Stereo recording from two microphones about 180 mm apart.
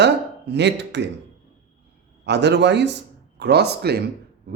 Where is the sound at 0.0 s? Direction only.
70° right (ahead or behind).